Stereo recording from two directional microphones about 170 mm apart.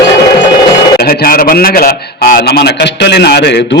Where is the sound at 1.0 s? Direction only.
60° left (ahead or behind).